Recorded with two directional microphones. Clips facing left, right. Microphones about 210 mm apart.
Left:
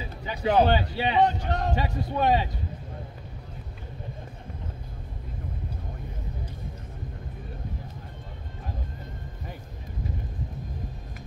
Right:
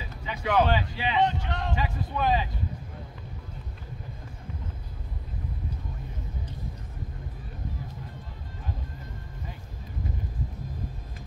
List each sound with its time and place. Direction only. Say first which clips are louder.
0.2 s a man's voice: left 3 dB; 35° left (ahead or behind)